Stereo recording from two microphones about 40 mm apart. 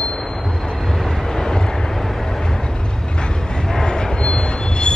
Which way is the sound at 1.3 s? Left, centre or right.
Centre.